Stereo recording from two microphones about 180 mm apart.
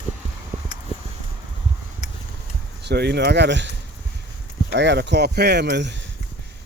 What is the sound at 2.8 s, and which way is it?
Speech, 65° right (ahead or behind).